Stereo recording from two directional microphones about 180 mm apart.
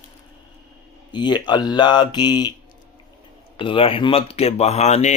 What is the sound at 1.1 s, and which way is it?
Speech, 25° left (ahead or behind).